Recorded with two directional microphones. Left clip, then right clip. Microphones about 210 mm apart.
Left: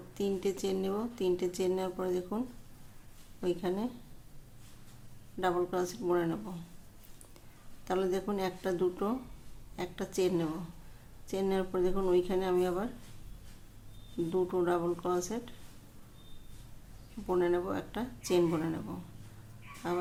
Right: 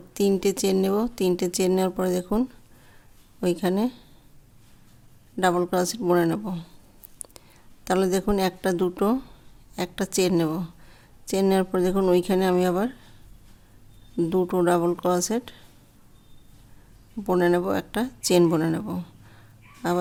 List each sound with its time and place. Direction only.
0.1 s speech: 50° right (ahead or behind)
3.4 s speech: 50° right (ahead or behind)
5.4 s speech: 50° right (ahead or behind)
7.9 s speech: 50° right (ahead or behind)
14.3 s speech: 50° right (ahead or behind)
17.2 s speech: 50° right (ahead or behind)